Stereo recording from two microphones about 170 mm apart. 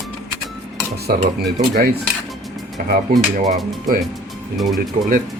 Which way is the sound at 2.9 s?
55° right (ahead or behind).